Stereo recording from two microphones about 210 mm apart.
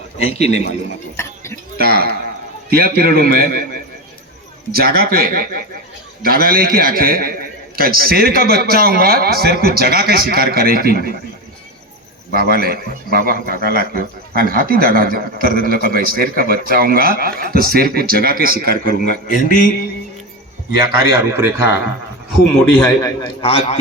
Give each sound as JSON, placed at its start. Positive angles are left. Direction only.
{"t": 0.5, "sound": "mantra", "side_deg": 30}
{"t": 1.1, "sound": "a sound", "side_deg": 10}
{"t": 1.8, "sound": "a man's voice", "side_deg": -45}
{"t": 12.3, "sound": "a man's voice", "side_deg": -45}
{"t": 19.3, "sound": "mantra", "side_deg": 40}
{"t": 21.1, "sound": "a man's voice", "side_deg": -10}
{"t": 22.8, "sound": "a man's voice", "side_deg": 15}